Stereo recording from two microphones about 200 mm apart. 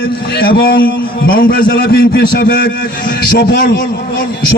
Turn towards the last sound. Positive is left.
turn(degrees=55)  # may be behind; listen again after turning